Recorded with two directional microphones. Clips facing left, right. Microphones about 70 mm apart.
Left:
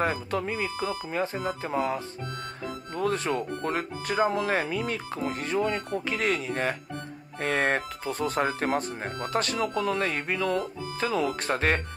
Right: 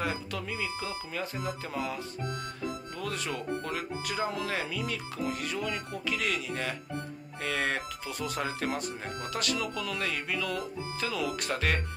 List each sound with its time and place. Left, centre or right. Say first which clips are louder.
0.0 s speech: left 6 dB; left